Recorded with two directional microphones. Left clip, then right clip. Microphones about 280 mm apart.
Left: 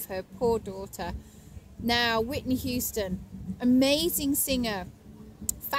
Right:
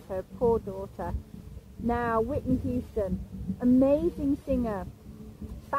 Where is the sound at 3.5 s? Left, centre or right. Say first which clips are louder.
Right 1 dB; left.